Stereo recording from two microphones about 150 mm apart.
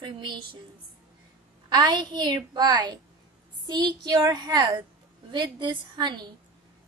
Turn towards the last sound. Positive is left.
turn(degrees=-30)  # may be behind; listen again after turning